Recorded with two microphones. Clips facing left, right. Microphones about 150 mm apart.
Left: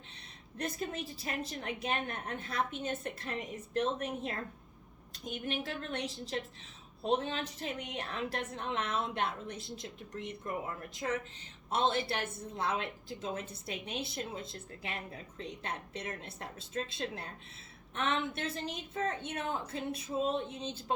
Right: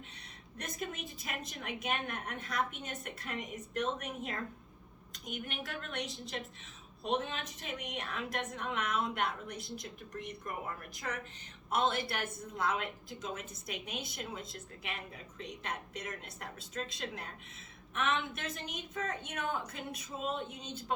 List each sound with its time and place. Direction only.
0.6 s a woman's voice: 30° left (ahead or behind)
11.7 s a woman's voice: 30° left (ahead or behind)